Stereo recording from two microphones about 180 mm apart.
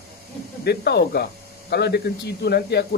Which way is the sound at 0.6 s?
65° left (ahead or behind).